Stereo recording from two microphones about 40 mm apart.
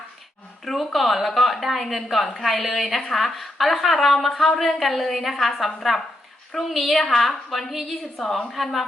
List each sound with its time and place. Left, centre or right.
0.6 s a woman's voice: centre